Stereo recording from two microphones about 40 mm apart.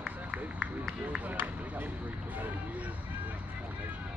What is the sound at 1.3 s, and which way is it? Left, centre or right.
Speech, right.